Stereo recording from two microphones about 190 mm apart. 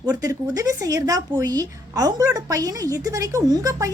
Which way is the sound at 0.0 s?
20° right (ahead or behind).